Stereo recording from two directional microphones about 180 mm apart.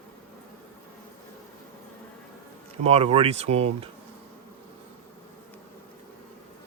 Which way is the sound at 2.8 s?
35° right (ahead or behind).